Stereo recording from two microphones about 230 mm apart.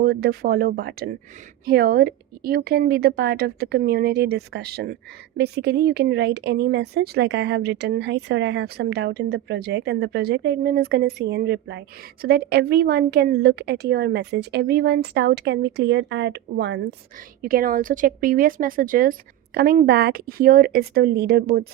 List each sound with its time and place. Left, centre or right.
0.0 s speech: right
17.4 s a woman's voice: right